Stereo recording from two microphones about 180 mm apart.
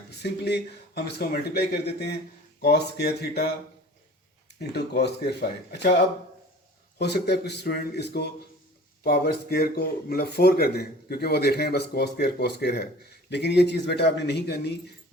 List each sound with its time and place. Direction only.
0.2 s speech: 65° left (ahead or behind)
4.7 s speech: 65° left (ahead or behind)
7.0 s speech: 70° left (ahead or behind)